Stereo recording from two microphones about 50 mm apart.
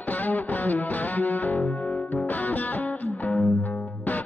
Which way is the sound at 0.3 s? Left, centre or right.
Left.